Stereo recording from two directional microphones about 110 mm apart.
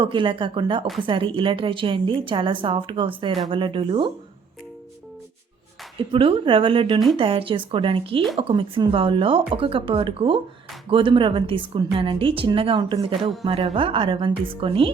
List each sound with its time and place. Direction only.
0.0 s a woman's voice: 50° right (ahead or behind)
6.1 s a woman's voice: 55° right (ahead or behind)